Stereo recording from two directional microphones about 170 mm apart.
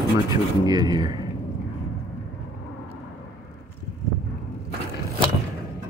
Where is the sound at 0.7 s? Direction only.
25° right (ahead or behind).